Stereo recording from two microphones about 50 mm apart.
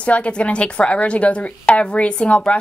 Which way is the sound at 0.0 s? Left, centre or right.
Left.